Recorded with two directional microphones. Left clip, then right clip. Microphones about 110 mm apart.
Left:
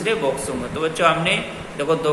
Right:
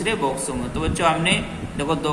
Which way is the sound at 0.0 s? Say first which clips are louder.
Left 2 dB; 45° right (ahead or behind).